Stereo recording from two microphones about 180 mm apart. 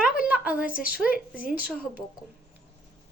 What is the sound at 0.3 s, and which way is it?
Speech, 10° right (ahead or behind).